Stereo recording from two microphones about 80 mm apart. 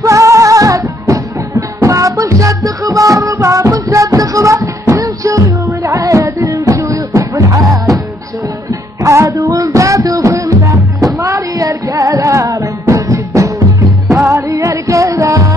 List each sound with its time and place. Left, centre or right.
0.0 s music: right
9.0 s music: right
11.2 s female singing: right
12.8 s music: right